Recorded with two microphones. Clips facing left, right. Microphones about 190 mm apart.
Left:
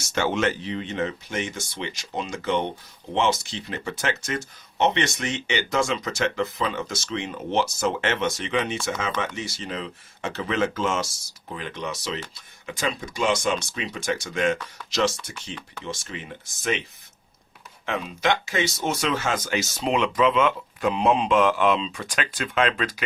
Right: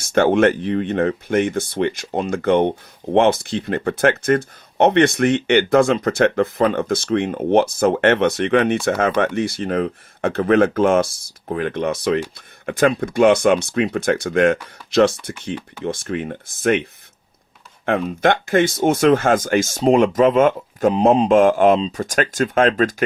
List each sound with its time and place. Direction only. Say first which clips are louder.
0.0 s speech: right 9 dB; 55° right (ahead or behind)
17.8 s speech: right 7 dB; 55° right (ahead or behind)